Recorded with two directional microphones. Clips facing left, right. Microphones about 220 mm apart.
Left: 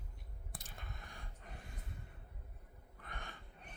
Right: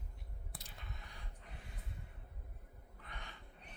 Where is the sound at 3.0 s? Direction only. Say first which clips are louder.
Left 3 dB; 50° left (ahead or behind).